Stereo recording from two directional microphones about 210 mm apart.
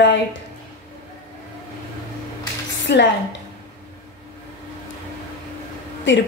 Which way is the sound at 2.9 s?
55° left (ahead or behind).